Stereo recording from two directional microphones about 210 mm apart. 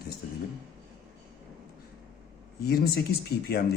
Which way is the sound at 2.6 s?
45° left (ahead or behind).